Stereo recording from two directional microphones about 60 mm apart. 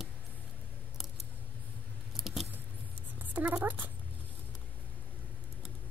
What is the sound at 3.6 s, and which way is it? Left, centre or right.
Speech, right.